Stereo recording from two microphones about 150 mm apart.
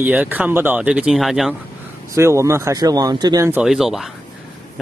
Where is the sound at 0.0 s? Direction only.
10° right (ahead or behind).